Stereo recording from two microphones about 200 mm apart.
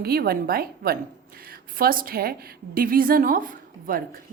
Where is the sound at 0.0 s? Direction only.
50° right (ahead or behind).